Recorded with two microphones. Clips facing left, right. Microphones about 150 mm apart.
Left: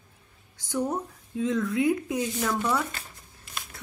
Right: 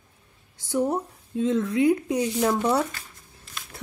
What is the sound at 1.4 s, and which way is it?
Speech, 30° right (ahead or behind).